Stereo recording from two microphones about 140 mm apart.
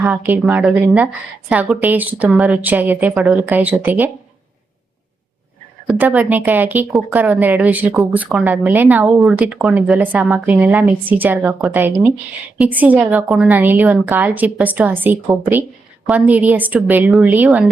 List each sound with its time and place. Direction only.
0.0 s a woman's voice: 15° right (ahead or behind)
6.0 s a woman's voice: 10° right (ahead or behind)